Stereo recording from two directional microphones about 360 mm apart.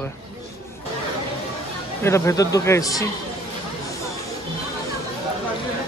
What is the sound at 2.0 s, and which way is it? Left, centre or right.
Speech, centre.